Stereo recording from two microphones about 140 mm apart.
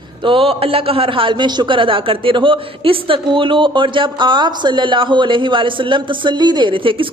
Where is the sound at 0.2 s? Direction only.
40° right (ahead or behind).